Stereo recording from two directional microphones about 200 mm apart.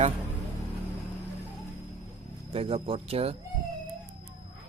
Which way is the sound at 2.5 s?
30° right (ahead or behind).